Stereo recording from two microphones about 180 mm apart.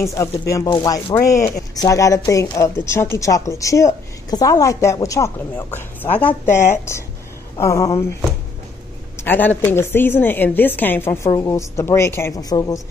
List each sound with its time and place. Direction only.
0.5 s speech: 20° left (ahead or behind)
7.6 s speech: 15° left (ahead or behind)
9.2 s speech: 10° left (ahead or behind)